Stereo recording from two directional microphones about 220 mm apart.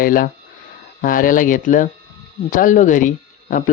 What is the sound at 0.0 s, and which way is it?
Speech, 40° left (ahead or behind).